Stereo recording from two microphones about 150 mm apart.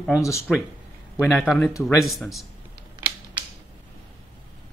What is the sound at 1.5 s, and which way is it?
Speech, centre (ahead or behind).